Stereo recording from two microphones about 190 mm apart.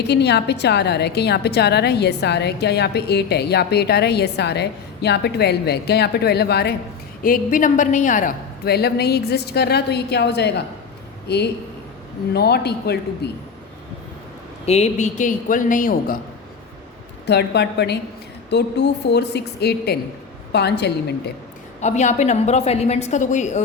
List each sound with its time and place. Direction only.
0.0 s a woman's voice: 60° left (ahead or behind)
7.2 s a woman's voice: 45° left (ahead or behind)
14.7 s a woman's voice: 35° left (ahead or behind)
17.2 s a woman's voice: 60° left (ahead or behind)
21.8 s a woman's voice: 35° left (ahead or behind)